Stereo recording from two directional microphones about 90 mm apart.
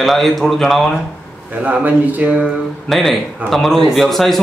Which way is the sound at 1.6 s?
15° right (ahead or behind).